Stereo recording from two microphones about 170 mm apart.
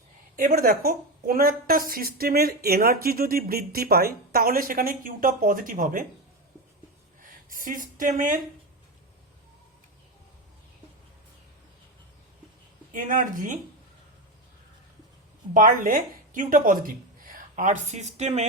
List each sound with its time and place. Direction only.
0.3 s a woman's voice: 55° right (ahead or behind)
7.2 s speech: 55° right (ahead or behind)
12.9 s speech: 50° right (ahead or behind)
15.5 s a woman's voice: 55° right (ahead or behind)